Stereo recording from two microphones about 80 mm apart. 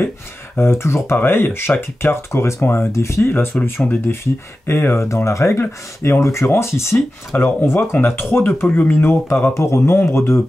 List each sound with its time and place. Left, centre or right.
0.6 s speech: left
9.5 s speech: left